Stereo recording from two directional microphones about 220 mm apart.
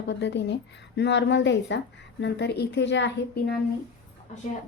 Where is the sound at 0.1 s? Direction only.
50° left (ahead or behind).